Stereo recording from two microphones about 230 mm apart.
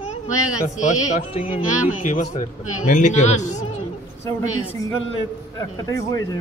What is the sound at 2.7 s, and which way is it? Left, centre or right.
Speech, left.